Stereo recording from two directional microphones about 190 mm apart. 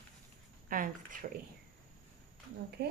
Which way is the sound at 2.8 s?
55° right (ahead or behind).